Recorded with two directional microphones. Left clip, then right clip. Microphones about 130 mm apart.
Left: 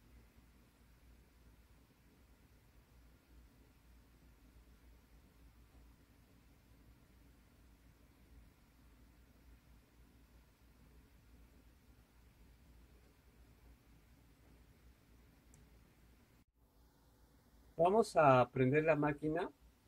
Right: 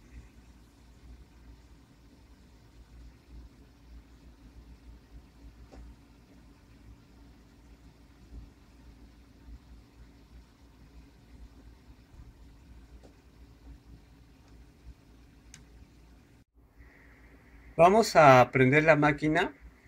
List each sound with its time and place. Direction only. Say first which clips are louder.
17.7 s speech: right 11 dB; 5° left (ahead or behind)